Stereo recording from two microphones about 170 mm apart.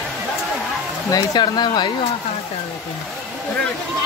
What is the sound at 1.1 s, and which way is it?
Speech, 25° left (ahead or behind).